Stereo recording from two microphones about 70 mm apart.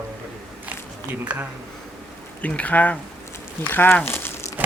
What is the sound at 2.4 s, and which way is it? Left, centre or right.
Speech, left.